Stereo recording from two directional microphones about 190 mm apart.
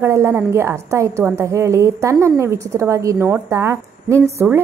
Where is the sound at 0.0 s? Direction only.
15° right (ahead or behind).